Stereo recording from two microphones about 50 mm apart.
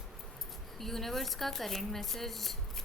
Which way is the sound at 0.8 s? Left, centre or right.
Centre.